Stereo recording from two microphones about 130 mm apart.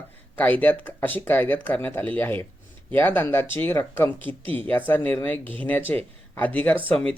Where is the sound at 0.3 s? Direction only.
10° left (ahead or behind).